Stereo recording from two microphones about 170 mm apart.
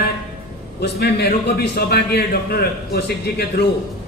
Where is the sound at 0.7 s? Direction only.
75° left (ahead or behind).